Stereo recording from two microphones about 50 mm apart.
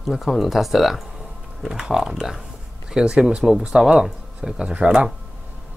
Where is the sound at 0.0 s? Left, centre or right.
Centre.